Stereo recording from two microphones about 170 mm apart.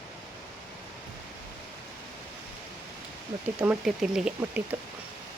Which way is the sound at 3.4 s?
10° right (ahead or behind).